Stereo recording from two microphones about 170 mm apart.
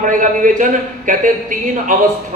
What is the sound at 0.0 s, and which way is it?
A man's voice, 50° right (ahead or behind).